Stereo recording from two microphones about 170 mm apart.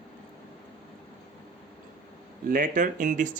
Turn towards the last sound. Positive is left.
turn(degrees=-50)  # may be behind; listen again after turning